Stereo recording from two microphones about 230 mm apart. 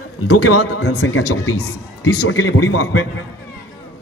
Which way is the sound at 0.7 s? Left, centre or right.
Left.